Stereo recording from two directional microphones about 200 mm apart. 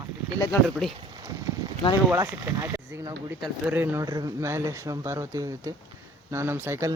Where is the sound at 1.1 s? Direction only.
20° right (ahead or behind).